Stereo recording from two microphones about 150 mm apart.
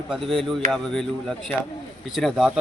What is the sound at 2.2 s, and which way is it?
Speech, centre (ahead or behind).